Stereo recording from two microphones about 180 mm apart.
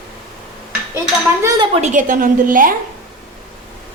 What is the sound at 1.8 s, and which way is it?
Speech, 45° right (ahead or behind).